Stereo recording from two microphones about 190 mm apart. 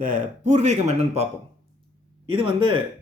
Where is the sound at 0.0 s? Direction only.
40° right (ahead or behind).